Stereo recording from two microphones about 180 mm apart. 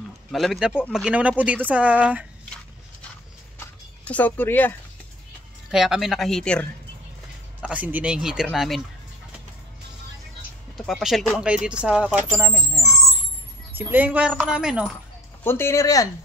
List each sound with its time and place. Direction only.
0.3 s speech: centre (ahead or behind)
3.5 s a sound: 10° left (ahead or behind)
5.7 s speech: centre (ahead or behind)
7.6 s speech: 10° right (ahead or behind)
10.9 s speech: centre (ahead or behind)
15.4 s speech: 15° left (ahead or behind)